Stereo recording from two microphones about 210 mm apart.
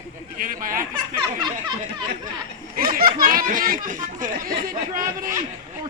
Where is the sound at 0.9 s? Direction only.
20° right (ahead or behind).